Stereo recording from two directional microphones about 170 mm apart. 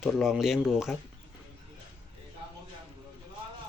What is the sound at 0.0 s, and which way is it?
Speech, centre (ahead or behind).